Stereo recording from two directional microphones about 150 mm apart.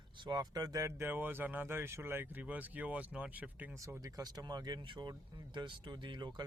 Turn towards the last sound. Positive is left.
turn(degrees=-30)  # may be behind; listen again after turning